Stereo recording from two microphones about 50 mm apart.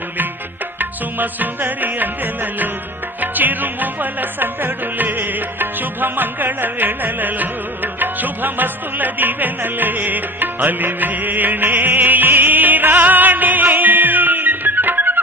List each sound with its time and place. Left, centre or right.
0.8 s music: right